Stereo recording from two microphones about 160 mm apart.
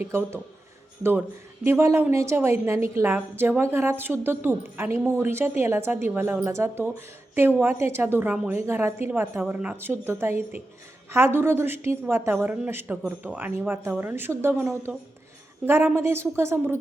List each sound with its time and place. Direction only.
0.0 s a woman's voice: 15° right (ahead or behind)
1.6 s a woman's voice: 15° right (ahead or behind)